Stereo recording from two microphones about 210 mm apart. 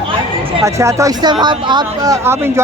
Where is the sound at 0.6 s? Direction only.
15° right (ahead or behind).